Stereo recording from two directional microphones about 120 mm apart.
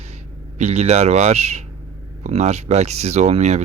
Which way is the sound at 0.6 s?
65° right (ahead or behind).